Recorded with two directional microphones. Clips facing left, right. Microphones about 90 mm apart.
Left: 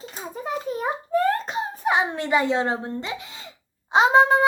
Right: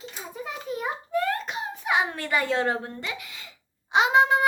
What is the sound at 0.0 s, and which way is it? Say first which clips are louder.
Hands: left 4 dB; 40° left (ahead or behind).